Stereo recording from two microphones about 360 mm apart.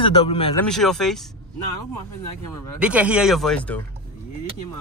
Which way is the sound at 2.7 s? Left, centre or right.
Centre.